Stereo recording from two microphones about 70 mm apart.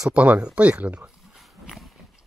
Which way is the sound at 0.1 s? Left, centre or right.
Centre.